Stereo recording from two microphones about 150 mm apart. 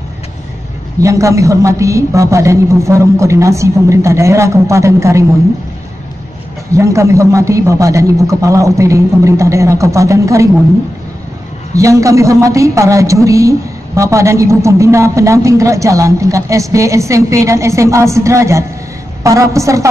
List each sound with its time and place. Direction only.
1.0 s a woman's voice: 20° right (ahead or behind)
6.7 s a woman's voice: 20° right (ahead or behind)
11.7 s a woman's voice: 20° right (ahead or behind)